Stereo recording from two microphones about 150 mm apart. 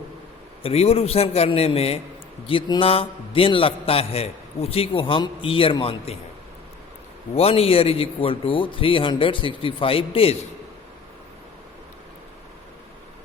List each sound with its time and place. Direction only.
0.6 s a man's voice: 40° left (ahead or behind)
7.3 s a man's voice: 40° left (ahead or behind)